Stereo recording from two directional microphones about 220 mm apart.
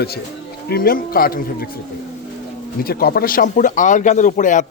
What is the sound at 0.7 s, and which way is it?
A man's voice, 40° left (ahead or behind).